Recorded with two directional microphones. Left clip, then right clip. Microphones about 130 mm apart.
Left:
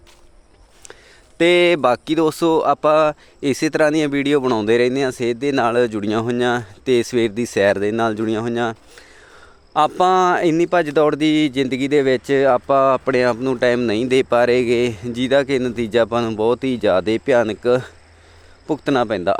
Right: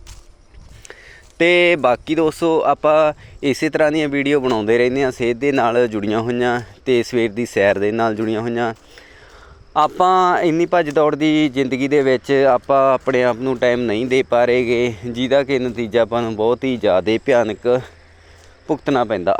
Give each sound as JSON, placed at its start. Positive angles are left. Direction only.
{"t": 1.4, "sound": "speech", "side_deg": 20}
{"t": 1.8, "sound": "speech", "side_deg": 30}
{"t": 17.1, "sound": "speech", "side_deg": 20}
{"t": 17.5, "sound": "speech", "side_deg": 45}
{"t": 18.7, "sound": "speech", "side_deg": 30}